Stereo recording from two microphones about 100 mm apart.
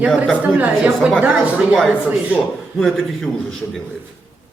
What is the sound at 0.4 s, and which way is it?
Speech, 15° right (ahead or behind).